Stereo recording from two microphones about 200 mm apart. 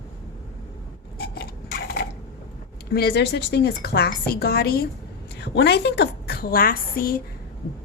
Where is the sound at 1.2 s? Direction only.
50° left (ahead or behind).